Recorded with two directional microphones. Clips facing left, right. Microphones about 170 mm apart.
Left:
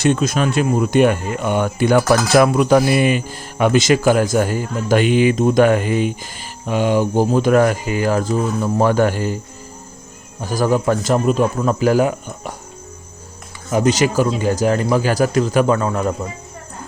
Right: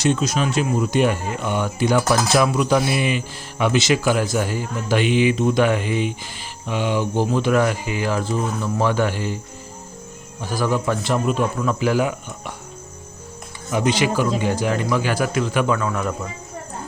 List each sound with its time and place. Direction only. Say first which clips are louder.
0.0 s speech: left 3 dB; 55° left (ahead or behind)
10.4 s speech: left 5 dB; 45° left (ahead or behind)
13.7 s speech: left 4 dB; 40° left (ahead or behind)